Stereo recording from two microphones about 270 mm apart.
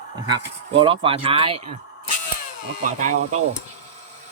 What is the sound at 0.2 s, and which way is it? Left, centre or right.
Speech, centre.